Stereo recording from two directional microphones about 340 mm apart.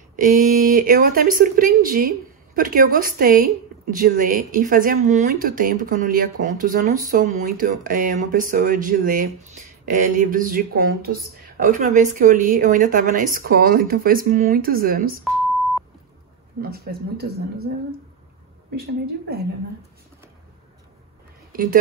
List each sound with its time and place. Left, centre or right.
0.1 s speech: right
16.6 s speech: right
21.5 s a sound: right